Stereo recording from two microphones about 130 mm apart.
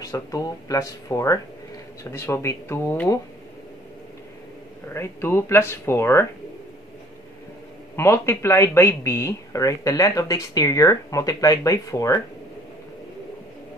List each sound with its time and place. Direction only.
0.0 s speech: 25° left (ahead or behind)
4.8 s speech: 20° left (ahead or behind)
7.9 s speech: 20° left (ahead or behind)